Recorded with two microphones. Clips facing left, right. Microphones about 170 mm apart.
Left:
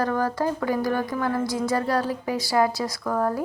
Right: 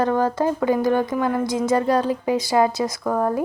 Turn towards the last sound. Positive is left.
turn(degrees=-20)  # may be behind; listen again after turning